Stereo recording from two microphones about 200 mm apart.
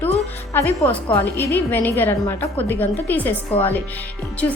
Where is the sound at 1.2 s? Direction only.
10° left (ahead or behind).